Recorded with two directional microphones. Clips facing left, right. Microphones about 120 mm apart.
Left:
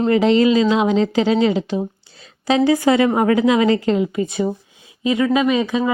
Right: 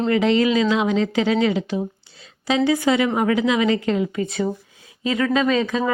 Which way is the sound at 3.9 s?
25° left (ahead or behind).